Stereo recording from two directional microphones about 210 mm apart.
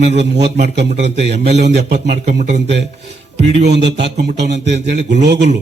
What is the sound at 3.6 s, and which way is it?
A man's voice, 55° right (ahead or behind).